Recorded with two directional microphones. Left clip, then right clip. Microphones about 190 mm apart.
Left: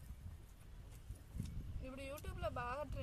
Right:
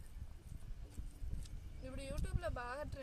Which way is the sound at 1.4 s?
15° right (ahead or behind).